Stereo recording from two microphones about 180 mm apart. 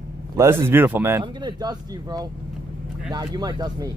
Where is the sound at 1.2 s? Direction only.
25° right (ahead or behind).